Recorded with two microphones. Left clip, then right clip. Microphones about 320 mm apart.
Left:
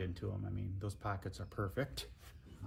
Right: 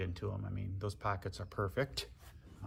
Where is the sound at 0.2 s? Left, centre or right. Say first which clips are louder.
Right 3 dB; centre.